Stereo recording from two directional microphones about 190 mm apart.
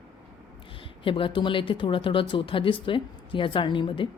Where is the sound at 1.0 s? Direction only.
25° left (ahead or behind).